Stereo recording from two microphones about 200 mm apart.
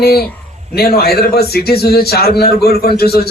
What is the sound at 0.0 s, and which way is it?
A man's voice, 50° left (ahead or behind).